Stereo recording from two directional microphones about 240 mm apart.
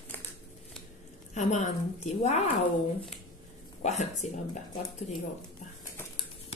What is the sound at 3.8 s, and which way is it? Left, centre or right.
Speech, left.